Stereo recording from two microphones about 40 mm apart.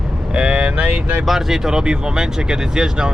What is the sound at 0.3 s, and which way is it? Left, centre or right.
Vehicle, centre.